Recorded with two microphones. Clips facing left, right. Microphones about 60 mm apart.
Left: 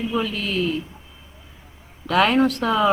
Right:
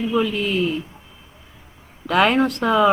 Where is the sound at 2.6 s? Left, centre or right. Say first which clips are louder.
Right 3 dB; right.